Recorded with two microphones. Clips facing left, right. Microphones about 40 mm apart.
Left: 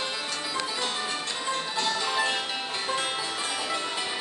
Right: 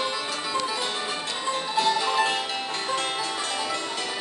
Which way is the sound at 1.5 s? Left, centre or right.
Centre.